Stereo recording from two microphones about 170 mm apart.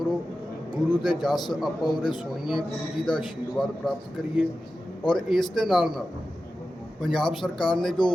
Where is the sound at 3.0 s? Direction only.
Centre (ahead or behind).